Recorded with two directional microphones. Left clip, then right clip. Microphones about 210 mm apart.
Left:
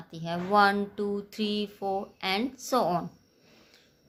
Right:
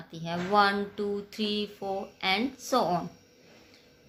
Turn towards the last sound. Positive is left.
turn(degrees=25)  # may be behind; listen again after turning